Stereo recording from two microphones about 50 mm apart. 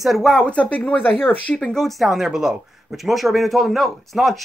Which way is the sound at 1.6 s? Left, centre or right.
Centre.